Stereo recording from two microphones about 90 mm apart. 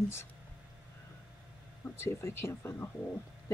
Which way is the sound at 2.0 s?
30° left (ahead or behind).